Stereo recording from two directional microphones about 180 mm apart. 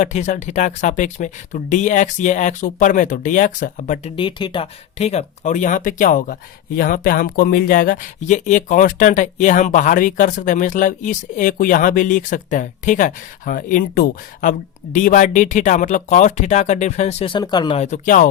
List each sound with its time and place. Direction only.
0.0 s speech: 40° left (ahead or behind)
4.2 s speech: 25° left (ahead or behind)
17.7 s speech: 40° left (ahead or behind)